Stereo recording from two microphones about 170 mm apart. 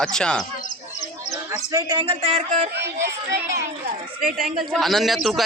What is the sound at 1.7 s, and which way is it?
Speech, 25° right (ahead or behind).